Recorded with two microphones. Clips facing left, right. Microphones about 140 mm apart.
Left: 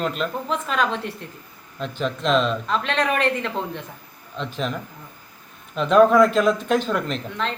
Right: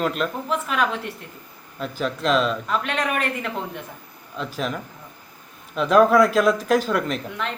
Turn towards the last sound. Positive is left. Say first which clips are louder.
# even
turn(degrees=-10)  # may be behind; listen again after turning